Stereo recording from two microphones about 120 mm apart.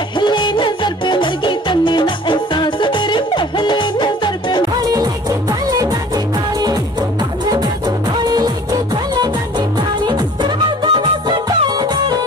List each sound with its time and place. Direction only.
0.2 s music: 40° left (ahead or behind)
4.8 s music: 35° right (ahead or behind)
8.9 s music: 35° right (ahead or behind)